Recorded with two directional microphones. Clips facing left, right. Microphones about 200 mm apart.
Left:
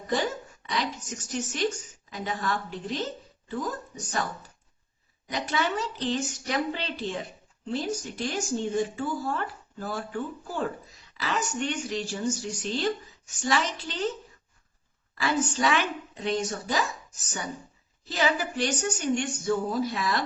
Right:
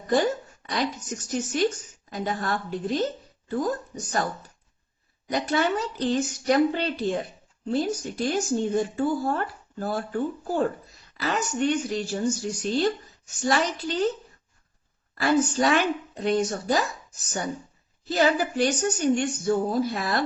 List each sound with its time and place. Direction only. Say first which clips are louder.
0.7 s speech: right 3 dB; 45° right (ahead or behind)
5.3 s a woman's voice: right 5 dB; 40° right (ahead or behind)
15.1 s a woman's voice: right 5 dB; 50° right (ahead or behind)
18.1 s a woman's voice: right 5 dB; 40° right (ahead or behind)